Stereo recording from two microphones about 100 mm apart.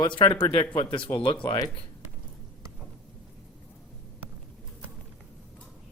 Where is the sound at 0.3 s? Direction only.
20° left (ahead or behind).